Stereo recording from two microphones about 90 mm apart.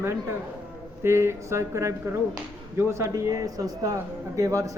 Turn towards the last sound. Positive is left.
turn(degrees=-40)  # may be behind; listen again after turning